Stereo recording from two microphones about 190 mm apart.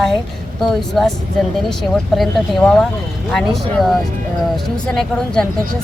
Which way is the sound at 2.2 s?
Centre (ahead or behind).